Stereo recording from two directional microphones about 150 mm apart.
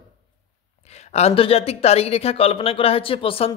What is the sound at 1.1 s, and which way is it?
Speech, 40° left (ahead or behind).